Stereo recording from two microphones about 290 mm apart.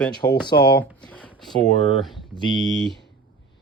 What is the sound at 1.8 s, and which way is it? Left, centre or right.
Speech, left.